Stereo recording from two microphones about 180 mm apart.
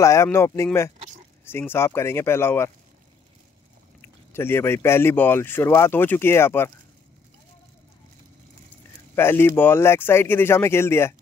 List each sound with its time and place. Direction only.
0.0 s speech: 15° left (ahead or behind)
0.9 s a sound: 40° right (ahead or behind)
1.4 s speech: 10° left (ahead or behind)
4.0 s speech: 15° left (ahead or behind)
9.1 s speech: 10° left (ahead or behind)